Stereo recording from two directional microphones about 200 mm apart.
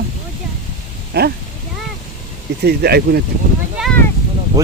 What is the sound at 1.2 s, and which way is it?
Speech, 50° right (ahead or behind).